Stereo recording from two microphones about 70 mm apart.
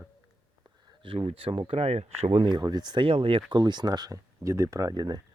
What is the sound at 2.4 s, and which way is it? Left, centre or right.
Speech, right.